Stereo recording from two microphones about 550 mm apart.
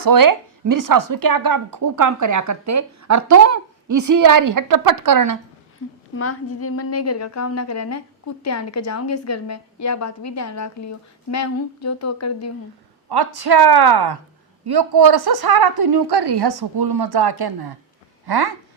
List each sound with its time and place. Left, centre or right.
0.0 s speech: right
6.1 s a woman's voice: left
13.1 s a woman's voice: right